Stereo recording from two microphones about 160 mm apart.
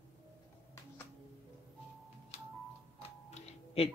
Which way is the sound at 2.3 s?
45° left (ahead or behind).